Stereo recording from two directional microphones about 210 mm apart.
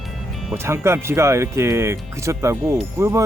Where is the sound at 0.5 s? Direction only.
10° right (ahead or behind).